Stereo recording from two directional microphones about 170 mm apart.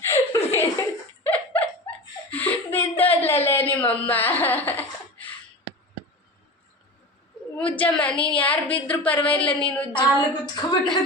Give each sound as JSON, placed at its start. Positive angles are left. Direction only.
{"t": 0.0, "sound": "laughter", "side_deg": 15}
{"t": 7.5, "sound": "a sound", "side_deg": 10}
{"t": 8.2, "sound": "a woman's voice", "side_deg": 30}
{"t": 8.6, "sound": "speech", "side_deg": 10}
{"t": 9.9, "sound": "a woman's voice", "side_deg": 25}